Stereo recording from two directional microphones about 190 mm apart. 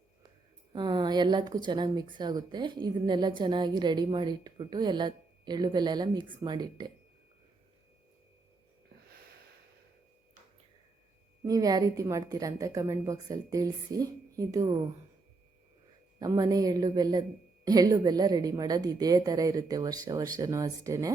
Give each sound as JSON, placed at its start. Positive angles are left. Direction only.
{"t": 0.7, "sound": "a woman's voice", "side_deg": -25}
{"t": 11.4, "sound": "a woman's voice", "side_deg": -20}
{"t": 16.2, "sound": "a woman's voice", "side_deg": -20}